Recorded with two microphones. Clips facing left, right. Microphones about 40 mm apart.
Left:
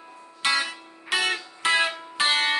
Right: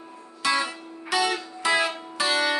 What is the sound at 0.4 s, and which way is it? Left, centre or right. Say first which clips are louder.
Music: even; left.